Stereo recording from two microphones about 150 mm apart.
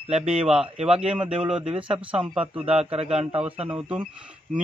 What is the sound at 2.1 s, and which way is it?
Speech, 5° right (ahead or behind).